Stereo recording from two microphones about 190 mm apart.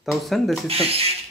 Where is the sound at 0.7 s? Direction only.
30° right (ahead or behind).